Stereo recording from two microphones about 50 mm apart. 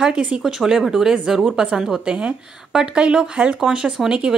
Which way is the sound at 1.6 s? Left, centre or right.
Centre.